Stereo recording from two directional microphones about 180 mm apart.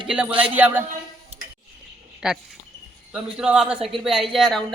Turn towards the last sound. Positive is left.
turn(degrees=0)  # may be behind; listen again after turning